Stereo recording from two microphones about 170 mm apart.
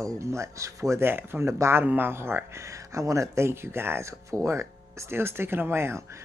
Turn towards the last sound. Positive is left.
turn(degrees=-15)  # may be behind; listen again after turning